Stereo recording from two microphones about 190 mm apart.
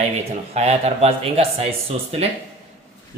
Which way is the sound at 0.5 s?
35° right (ahead or behind).